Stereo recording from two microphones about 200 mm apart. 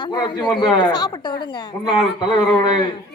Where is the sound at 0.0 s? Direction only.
25° left (ahead or behind).